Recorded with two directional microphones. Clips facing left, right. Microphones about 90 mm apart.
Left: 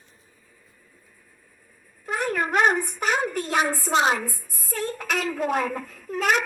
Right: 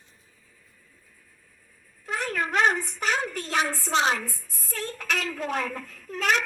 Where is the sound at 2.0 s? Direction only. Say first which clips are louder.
Left 3 dB; 45° left (ahead or behind).